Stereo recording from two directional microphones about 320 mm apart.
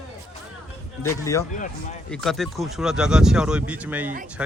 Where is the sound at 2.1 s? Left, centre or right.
Centre.